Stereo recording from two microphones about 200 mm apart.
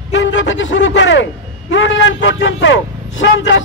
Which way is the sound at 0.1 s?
65° left (ahead or behind).